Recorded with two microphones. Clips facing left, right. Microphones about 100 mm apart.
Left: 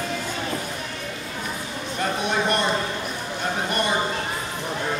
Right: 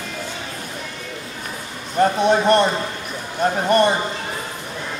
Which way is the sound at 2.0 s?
40° right (ahead or behind).